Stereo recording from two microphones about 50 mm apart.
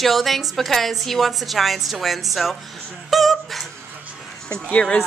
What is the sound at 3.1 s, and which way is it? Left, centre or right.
Whimper, centre.